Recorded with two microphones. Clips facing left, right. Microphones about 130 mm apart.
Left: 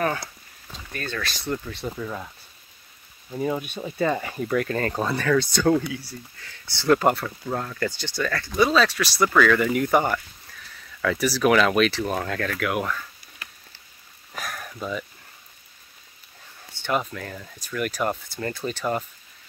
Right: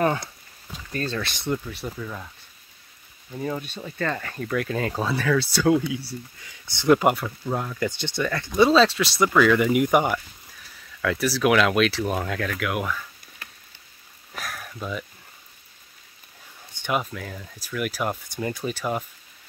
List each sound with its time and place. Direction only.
0.9 s speech: 30° right (ahead or behind)
2.0 s speech: 10° left (ahead or behind)
3.3 s speech: 10° left (ahead or behind); by 5.9 s 5° right (ahead or behind)
5.9 s speech: 25° right (ahead or behind)
6.4 s speech: 15° right (ahead or behind)
7.9 s speech: 20° right (ahead or behind)
11.0 s speech: centre (ahead or behind)
14.3 s a sound: centre (ahead or behind)
16.7 s speech: 10° right (ahead or behind)